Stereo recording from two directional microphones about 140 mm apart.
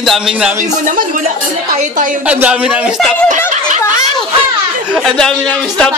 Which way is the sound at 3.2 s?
60° right (ahead or behind).